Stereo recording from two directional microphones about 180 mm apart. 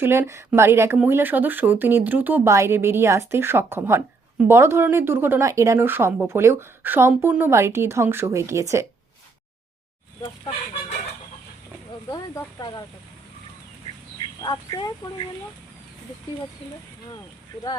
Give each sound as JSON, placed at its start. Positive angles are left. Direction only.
{"t": 0.0, "sound": "speech", "side_deg": -15}
{"t": 12.1, "sound": "speech", "side_deg": 20}
{"t": 14.2, "sound": "speech", "side_deg": 25}